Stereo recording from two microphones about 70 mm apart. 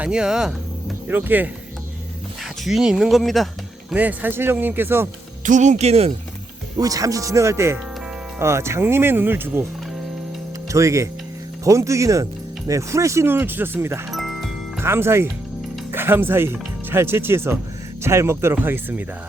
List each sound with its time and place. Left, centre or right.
0.0 s speech: centre
1.0 s speech: right
2.6 s speech: centre
3.9 s speech: right
6.7 s speech: right
10.7 s speech: right
13.3 s speech: right
14.1 s music: centre
14.8 s speech: right
18.5 s speech: right